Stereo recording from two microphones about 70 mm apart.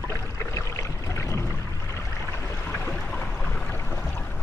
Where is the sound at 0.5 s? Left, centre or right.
Left.